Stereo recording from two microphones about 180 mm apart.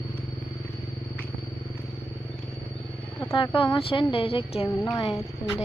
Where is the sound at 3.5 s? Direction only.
30° left (ahead or behind).